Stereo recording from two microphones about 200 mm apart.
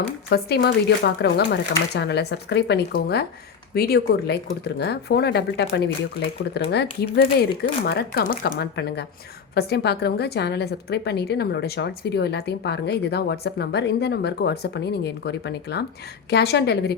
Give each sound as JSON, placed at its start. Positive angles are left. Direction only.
{"t": 0.3, "sound": "a woman's voice", "side_deg": 50}
{"t": 6.7, "sound": "a woman's voice", "side_deg": 55}